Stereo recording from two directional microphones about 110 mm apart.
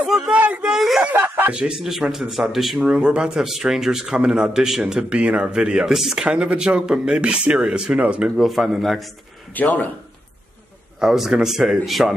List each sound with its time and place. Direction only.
0.0 s speech: 5° right (ahead or behind)
1.1 s speech: 20° right (ahead or behind)
1.5 s speech: 5° right (ahead or behind)
9.5 s speech: 15° left (ahead or behind)
11.0 s speech: 5° right (ahead or behind)